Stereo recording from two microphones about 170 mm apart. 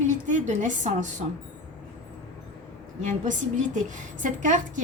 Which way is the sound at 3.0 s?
45° right (ahead or behind).